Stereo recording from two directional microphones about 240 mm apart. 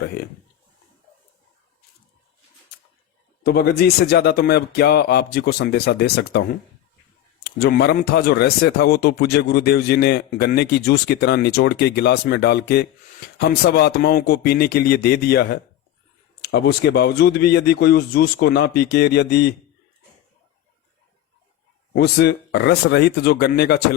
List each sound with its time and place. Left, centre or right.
3.4 s a man's voice: left
7.4 s a man's voice: left
21.9 s speech: left